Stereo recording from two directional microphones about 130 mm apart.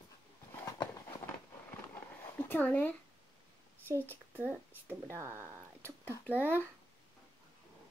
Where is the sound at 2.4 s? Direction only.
15° left (ahead or behind).